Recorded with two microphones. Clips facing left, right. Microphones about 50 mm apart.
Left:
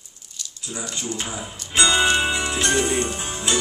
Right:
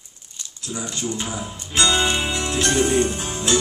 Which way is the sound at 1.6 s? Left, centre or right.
Centre.